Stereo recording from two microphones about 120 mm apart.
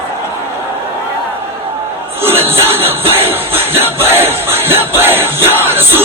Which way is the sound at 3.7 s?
20° right (ahead or behind).